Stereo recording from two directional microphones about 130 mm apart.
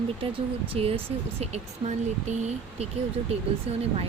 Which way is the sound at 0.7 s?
50° right (ahead or behind).